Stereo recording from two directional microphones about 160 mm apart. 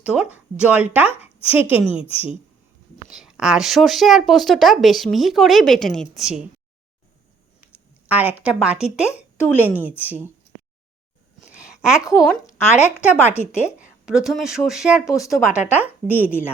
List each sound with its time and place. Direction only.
0.0 s a woman's voice: 5° right (ahead or behind)
3.1 s speech: 5° right (ahead or behind)
7.6 s speech: 10° right (ahead or behind)
11.5 s a sound: 5° right (ahead or behind)
12.1 s speech: 5° right (ahead or behind)
13.0 s a woman's voice: 15° left (ahead or behind)
14.0 s speech: 5° right (ahead or behind)
15.0 s speech: 20° left (ahead or behind)
15.6 s a woman's voice: 10° right (ahead or behind)